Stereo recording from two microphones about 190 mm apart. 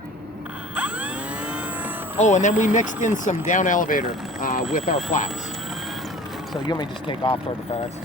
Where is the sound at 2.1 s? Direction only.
40° left (ahead or behind).